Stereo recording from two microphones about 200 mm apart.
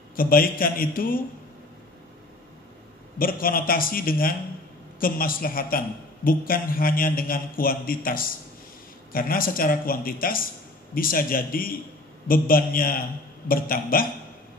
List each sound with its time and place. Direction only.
0.1 s a man's voice: 45° left (ahead or behind)
3.2 s a man's voice: 45° left (ahead or behind)